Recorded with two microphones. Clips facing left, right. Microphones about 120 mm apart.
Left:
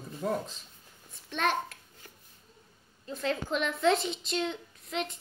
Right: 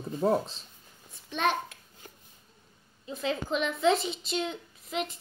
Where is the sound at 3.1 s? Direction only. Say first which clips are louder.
Right 1 dB; 5° right (ahead or behind).